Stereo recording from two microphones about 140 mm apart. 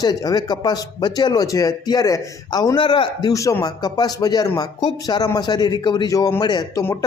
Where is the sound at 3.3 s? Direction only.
25° left (ahead or behind).